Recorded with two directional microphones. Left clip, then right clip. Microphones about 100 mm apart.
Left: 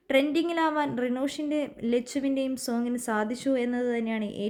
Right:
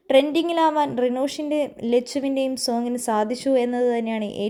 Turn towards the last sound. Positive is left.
turn(degrees=-25)  # may be behind; listen again after turning